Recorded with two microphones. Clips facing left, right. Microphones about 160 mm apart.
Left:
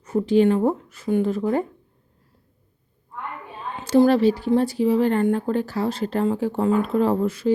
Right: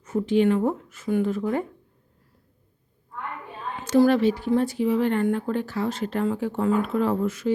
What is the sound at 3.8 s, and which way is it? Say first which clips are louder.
Speech: left 2 dB; 30° left (ahead or behind).